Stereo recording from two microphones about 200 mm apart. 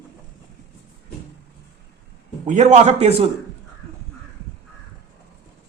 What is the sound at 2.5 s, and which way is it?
Speech, 35° right (ahead or behind).